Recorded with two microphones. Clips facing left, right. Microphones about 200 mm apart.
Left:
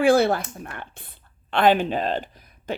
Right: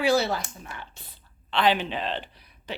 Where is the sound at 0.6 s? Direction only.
55° left (ahead or behind).